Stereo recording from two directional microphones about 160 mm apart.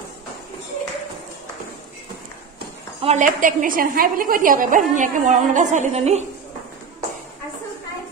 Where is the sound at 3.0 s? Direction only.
45° right (ahead or behind).